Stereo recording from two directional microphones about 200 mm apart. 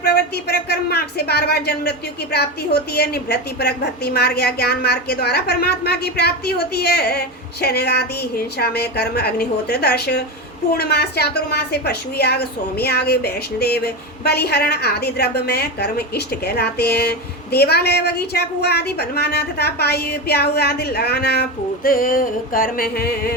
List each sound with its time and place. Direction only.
0.0 s a woman's voice: 55° left (ahead or behind)